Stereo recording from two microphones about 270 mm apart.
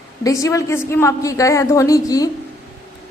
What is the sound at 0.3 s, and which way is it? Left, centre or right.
A woman's voice, centre.